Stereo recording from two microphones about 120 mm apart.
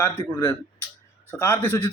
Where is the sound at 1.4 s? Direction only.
20° left (ahead or behind).